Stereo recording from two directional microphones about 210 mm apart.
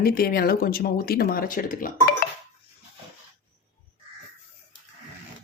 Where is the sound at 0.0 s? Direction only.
45° left (ahead or behind).